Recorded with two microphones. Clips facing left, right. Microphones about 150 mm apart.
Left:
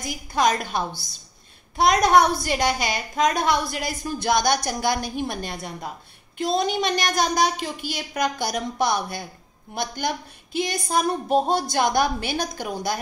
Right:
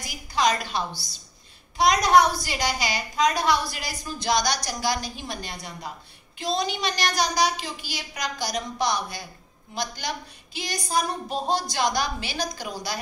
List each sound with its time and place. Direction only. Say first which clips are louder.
0.0 s a woman's voice: left 2 dB; 50° left (ahead or behind)